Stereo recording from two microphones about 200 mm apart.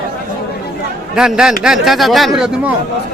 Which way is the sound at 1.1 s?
5° right (ahead or behind).